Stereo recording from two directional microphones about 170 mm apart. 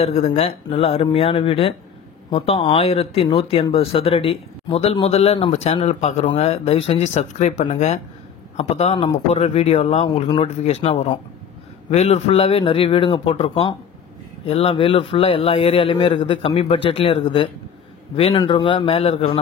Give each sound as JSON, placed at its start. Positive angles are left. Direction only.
{"t": 0.0, "sound": "a man's voice", "side_deg": 40}
{"t": 8.9, "sound": "speech", "side_deg": 25}
{"t": 9.3, "sound": "a man's voice", "side_deg": 40}